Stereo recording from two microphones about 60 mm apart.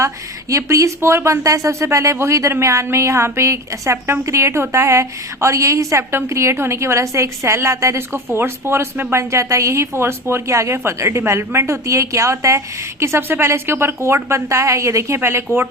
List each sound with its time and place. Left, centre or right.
0.5 s speech: right
9.1 s speech: right